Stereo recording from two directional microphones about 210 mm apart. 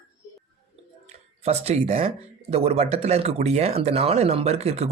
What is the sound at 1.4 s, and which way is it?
Speech, 30° right (ahead or behind).